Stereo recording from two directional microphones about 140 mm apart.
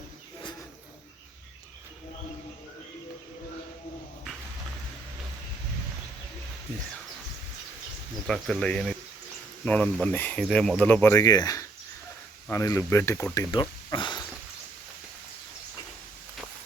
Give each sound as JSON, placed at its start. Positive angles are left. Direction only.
{"t": 8.3, "sound": "speech", "side_deg": 5}